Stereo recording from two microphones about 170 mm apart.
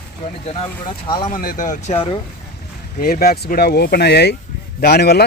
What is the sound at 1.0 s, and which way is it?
Speech, 30° left (ahead or behind).